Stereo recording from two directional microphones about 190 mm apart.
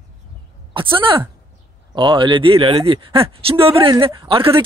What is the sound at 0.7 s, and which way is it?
Speech, 25° right (ahead or behind).